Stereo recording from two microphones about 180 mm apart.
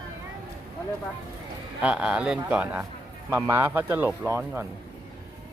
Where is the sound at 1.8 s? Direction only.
5° right (ahead or behind).